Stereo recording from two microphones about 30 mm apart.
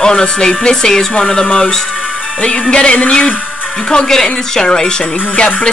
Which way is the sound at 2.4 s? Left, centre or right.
Left.